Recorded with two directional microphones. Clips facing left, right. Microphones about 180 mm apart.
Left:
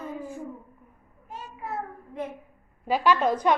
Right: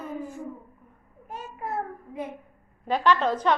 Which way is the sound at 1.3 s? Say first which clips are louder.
Right 2 dB; 45° right (ahead or behind).